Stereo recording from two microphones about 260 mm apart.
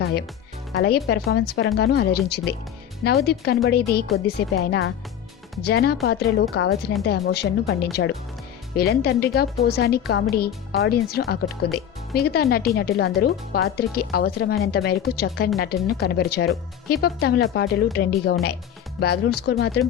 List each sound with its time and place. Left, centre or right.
0.0 s speech: left